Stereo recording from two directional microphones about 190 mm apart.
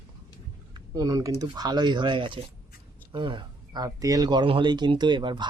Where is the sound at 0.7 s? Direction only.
20° right (ahead or behind).